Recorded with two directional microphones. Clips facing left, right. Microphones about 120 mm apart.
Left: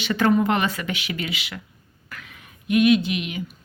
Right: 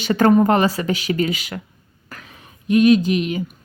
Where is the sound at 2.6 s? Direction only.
35° right (ahead or behind).